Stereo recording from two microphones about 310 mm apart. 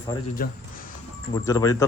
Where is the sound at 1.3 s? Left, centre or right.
Centre.